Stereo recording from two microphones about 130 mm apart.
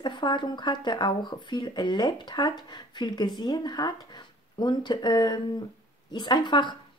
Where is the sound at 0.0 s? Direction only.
35° left (ahead or behind).